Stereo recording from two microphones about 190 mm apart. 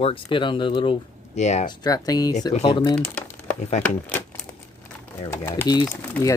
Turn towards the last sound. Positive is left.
turn(degrees=15)  # may be behind; listen again after turning